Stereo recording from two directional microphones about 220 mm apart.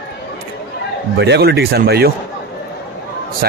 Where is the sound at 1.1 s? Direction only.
50° right (ahead or behind).